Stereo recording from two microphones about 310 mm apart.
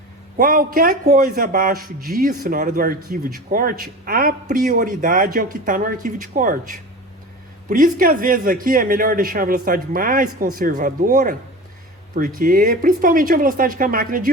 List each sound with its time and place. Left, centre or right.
0.3 s a man's voice: right
12.4 s a man's voice: right